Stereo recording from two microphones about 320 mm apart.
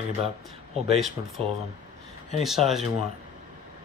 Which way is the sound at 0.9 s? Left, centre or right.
Centre.